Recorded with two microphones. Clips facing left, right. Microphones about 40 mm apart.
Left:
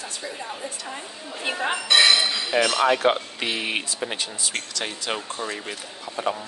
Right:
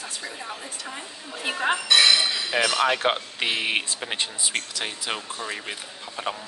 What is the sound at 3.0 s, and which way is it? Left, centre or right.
Speech, right.